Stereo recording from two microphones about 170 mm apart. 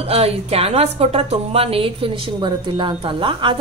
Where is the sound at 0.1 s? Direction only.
35° right (ahead or behind).